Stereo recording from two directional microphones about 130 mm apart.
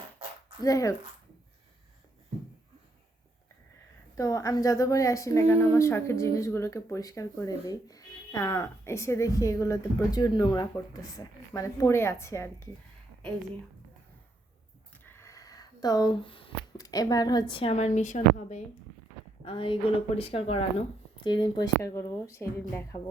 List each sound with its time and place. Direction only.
0.6 s a woman's voice: 25° left (ahead or behind)
4.2 s a woman's voice: 25° left (ahead or behind)
11.1 s a woman's voice: 25° left (ahead or behind)
15.0 s a sound: 20° left (ahead or behind); by 16.5 s 40° left (ahead or behind)
16.7 s a woman's voice: 30° left (ahead or behind); by 18.6 s 70° left (ahead or behind)
19.5 s a woman's voice: 40° left (ahead or behind)
21.2 s a woman's voice: 35° left (ahead or behind)
21.8 s a woman's voice: 25° left (ahead or behind)